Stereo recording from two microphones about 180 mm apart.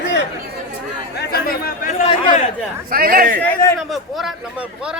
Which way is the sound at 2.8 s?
55° right (ahead or behind).